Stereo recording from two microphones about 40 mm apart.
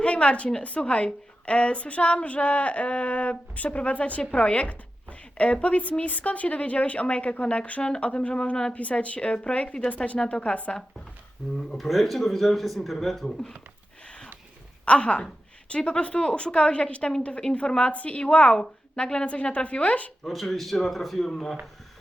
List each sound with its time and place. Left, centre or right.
0.0 s a woman's voice: left
11.9 s speech: centre
14.0 s a sound: left
14.8 s a woman's voice: left
20.2 s speech: centre
21.2 s speech: centre